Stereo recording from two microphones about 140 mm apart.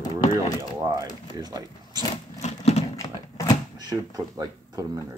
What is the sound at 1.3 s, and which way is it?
Speech, 25° right (ahead or behind).